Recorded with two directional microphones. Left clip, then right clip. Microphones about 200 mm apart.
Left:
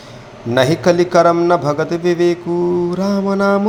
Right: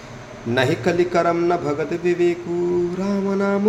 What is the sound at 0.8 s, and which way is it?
Mantra, 25° left (ahead or behind).